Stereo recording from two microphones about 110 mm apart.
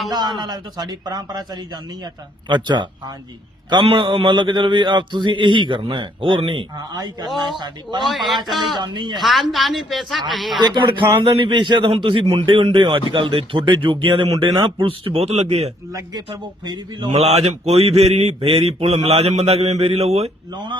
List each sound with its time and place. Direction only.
0.1 s a man's voice: 40° right (ahead or behind)
8.0 s speech: centre (ahead or behind)
8.8 s a man's voice: 40° right (ahead or behind)
9.1 s speech: centre (ahead or behind)
10.6 s a man's voice: 45° right (ahead or behind); by 15.7 s 75° right (ahead or behind)
15.9 s speech: 30° right (ahead or behind)
16.6 s a man's voice: 40° right (ahead or behind)
17.1 s speech: 75° right (ahead or behind)
18.3 s speech: 65° right (ahead or behind)